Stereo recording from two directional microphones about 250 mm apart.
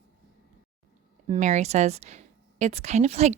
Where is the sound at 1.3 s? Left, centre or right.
Right.